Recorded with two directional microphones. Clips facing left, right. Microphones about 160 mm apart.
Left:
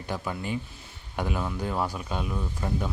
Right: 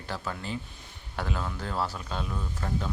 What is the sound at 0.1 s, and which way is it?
Speech, 15° left (ahead or behind).